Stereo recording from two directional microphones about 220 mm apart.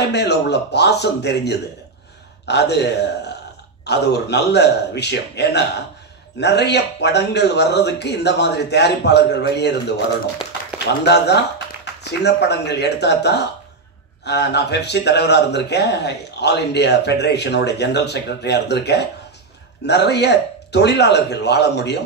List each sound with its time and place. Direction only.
0.0 s a man's voice: 50° left (ahead or behind)
10.4 s speech: 5° right (ahead or behind)
11.1 s a man's voice: 50° left (ahead or behind)